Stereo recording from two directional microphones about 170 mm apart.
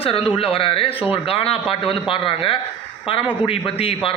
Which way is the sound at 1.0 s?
10° right (ahead or behind).